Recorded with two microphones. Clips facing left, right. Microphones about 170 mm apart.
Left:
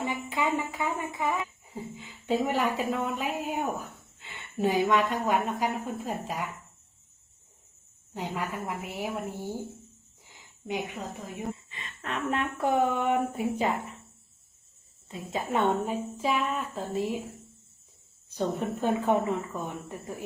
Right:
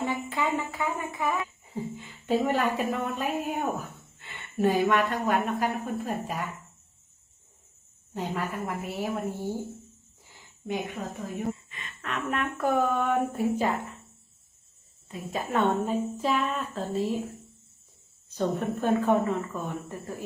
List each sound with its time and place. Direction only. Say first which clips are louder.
0.0 s speech: right 1 dB; 15° left (ahead or behind)
8.1 s speech: right 2 dB; 15° left (ahead or behind)
10.2 s a sound: right 2 dB; 15° left (ahead or behind)
11.5 s a sound: even; 30° left (ahead or behind)
12.8 s speech: even; 15° left (ahead or behind)
15.1 s speech: right 1 dB; 20° left (ahead or behind)
18.3 s speech: right 1 dB; 15° left (ahead or behind)